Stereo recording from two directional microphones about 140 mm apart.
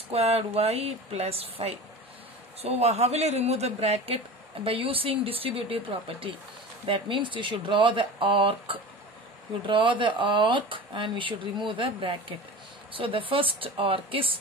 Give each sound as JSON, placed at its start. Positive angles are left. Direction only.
{"t": 0.1, "sound": "speech", "side_deg": -45}